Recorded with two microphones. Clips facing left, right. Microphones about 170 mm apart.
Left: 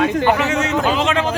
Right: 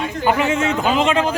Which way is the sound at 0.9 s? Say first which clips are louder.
Right 1 dB; 5° right (ahead or behind).